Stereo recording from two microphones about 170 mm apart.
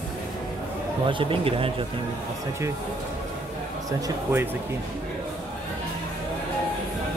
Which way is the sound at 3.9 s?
20° right (ahead or behind).